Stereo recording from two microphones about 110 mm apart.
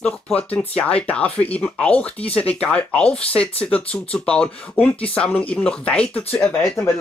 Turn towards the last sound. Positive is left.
turn(degrees=10)  # may be behind; listen again after turning